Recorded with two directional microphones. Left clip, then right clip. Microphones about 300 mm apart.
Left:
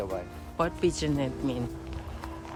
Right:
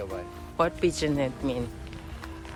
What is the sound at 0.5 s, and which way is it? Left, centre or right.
Speech, centre.